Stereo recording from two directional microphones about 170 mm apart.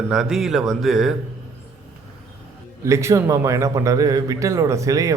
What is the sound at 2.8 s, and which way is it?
A man's voice, 15° right (ahead or behind).